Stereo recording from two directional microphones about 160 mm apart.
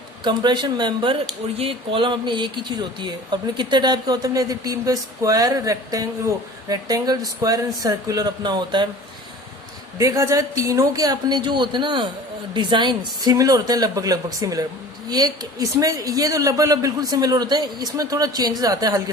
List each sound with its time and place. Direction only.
0.3 s speech: 30° right (ahead or behind)
10.0 s speech: 20° right (ahead or behind)